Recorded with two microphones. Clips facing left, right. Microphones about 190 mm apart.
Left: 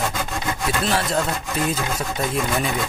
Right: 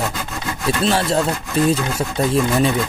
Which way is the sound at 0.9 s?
30° right (ahead or behind).